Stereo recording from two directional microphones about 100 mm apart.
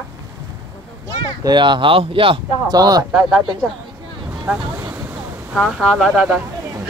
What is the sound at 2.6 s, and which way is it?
Speech, 40° right (ahead or behind).